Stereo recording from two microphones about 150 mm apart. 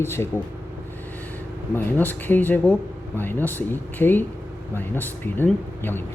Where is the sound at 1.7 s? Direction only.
10° left (ahead or behind).